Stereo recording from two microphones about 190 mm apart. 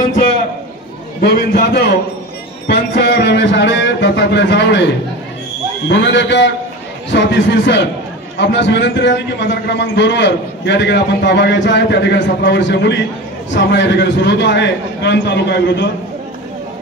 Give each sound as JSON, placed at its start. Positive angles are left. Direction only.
{"t": 1.2, "sound": "a man's voice", "side_deg": 60}